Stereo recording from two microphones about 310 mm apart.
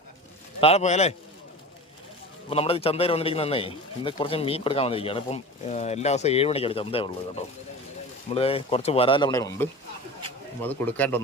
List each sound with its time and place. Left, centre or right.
0.6 s a man's voice: left
2.5 s a man's voice: centre